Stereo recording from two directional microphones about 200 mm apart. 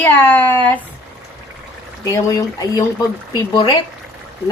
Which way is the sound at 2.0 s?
15° left (ahead or behind).